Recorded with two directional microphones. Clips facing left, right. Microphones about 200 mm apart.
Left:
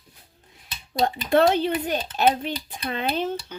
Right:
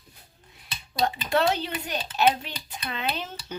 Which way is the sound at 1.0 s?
50° left (ahead or behind).